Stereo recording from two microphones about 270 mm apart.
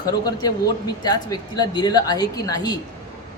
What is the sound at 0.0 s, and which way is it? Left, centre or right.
Speech, centre.